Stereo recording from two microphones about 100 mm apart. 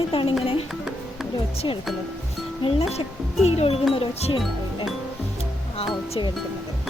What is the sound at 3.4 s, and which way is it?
Speech, 85° left.